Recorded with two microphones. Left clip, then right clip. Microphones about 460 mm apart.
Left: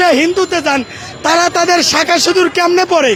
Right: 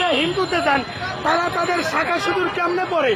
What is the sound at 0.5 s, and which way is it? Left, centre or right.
Speech, left.